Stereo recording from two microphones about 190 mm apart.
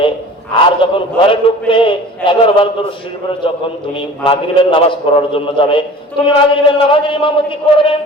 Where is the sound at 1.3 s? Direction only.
25° left (ahead or behind).